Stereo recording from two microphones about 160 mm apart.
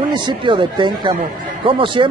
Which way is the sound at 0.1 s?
30° right (ahead or behind).